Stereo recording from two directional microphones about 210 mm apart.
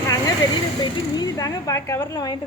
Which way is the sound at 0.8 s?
15° left (ahead or behind).